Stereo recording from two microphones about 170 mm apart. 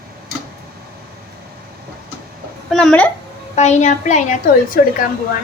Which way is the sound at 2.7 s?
5° left (ahead or behind).